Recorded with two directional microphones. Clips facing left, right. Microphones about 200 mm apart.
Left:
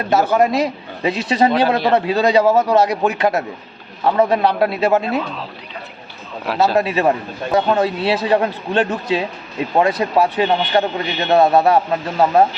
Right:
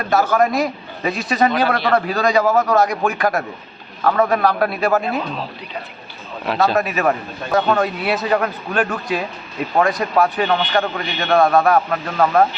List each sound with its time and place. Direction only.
0.0 s a man's voice: 20° left (ahead or behind)
6.7 s a man's voice: 25° left (ahead or behind)